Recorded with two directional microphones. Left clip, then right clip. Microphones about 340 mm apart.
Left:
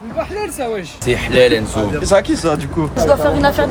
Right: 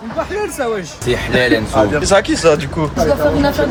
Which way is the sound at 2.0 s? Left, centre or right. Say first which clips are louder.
Left 1 dB; centre.